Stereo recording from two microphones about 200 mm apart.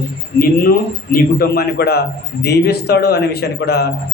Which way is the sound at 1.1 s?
50° left (ahead or behind).